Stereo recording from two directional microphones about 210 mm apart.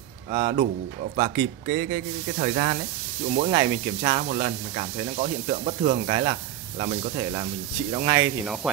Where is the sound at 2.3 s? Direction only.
35° right (ahead or behind).